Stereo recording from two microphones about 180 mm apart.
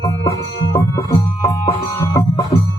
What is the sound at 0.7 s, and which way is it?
Music, 15° left (ahead or behind).